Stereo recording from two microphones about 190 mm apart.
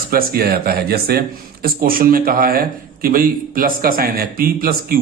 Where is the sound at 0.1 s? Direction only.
50° right (ahead or behind).